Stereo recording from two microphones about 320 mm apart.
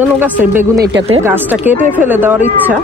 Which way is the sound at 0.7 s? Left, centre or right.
Right.